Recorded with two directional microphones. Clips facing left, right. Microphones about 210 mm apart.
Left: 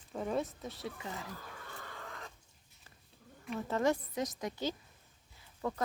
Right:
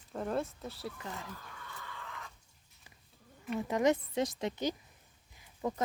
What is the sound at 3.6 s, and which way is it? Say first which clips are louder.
A woman's voice: right 2 dB; 15° right (ahead or behind).